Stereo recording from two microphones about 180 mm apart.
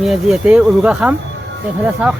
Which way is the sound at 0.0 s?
Centre (ahead or behind).